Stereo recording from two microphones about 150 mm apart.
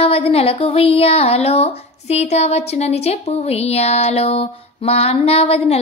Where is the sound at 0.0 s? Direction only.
40° left (ahead or behind).